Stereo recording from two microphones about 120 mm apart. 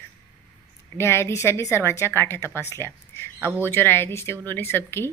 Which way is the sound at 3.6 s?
15° left (ahead or behind).